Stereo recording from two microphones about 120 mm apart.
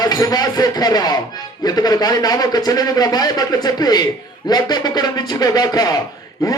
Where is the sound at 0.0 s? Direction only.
35° left (ahead or behind).